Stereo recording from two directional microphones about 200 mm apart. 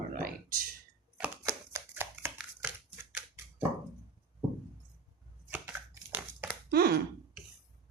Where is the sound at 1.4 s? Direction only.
15° right (ahead or behind).